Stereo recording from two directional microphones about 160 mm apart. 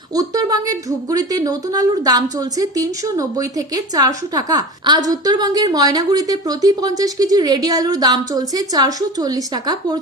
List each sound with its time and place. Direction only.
0.2 s a woman's voice: 25° right (ahead or behind)